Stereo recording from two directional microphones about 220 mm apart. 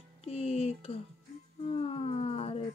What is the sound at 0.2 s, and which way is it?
Music, 25° left (ahead or behind).